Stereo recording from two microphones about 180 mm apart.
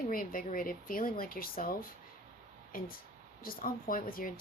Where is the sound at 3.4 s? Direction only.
55° left (ahead or behind).